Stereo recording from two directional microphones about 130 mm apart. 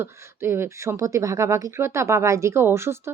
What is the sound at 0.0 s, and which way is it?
Speech, 20° right (ahead or behind).